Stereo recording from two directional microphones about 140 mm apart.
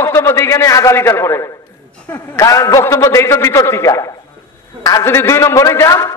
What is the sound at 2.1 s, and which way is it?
A man's voice, 25° left (ahead or behind).